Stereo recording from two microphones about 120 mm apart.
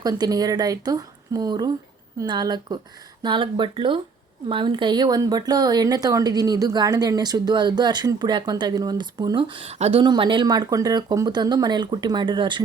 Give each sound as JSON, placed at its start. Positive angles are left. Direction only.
{"t": 0.0, "sound": "speech", "side_deg": -30}
{"t": 10.0, "sound": "speech", "side_deg": -40}